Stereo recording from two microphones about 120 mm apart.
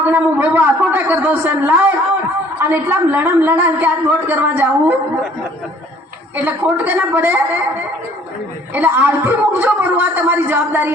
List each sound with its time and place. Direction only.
0.1 s a man's voice: 15° right (ahead or behind)
6.3 s a woman's voice: 15° right (ahead or behind)
8.7 s a woman's voice: 15° right (ahead or behind)